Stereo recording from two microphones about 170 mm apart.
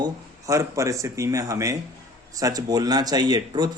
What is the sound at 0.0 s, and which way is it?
A man's voice, 20° right (ahead or behind).